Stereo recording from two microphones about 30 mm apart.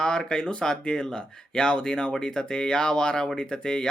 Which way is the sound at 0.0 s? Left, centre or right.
Left.